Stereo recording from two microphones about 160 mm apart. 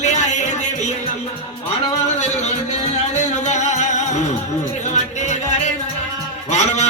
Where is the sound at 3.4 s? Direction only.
45° left (ahead or behind).